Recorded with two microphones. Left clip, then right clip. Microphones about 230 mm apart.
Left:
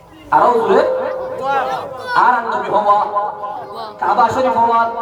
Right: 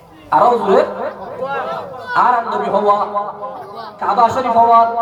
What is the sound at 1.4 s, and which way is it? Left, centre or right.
Speech, left.